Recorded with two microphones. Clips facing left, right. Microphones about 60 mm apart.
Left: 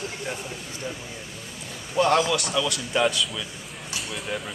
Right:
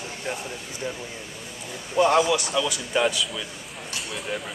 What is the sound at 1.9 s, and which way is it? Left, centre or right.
Speech, centre.